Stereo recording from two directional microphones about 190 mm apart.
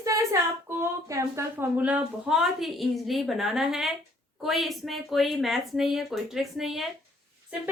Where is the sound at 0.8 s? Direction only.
15° right (ahead or behind).